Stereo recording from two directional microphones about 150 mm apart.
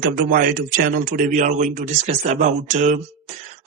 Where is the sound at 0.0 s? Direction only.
70° right (ahead or behind).